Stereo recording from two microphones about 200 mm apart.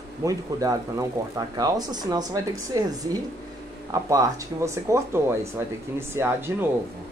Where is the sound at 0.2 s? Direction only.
15° right (ahead or behind).